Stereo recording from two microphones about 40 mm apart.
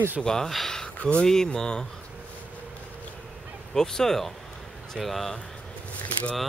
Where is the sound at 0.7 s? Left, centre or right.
Centre.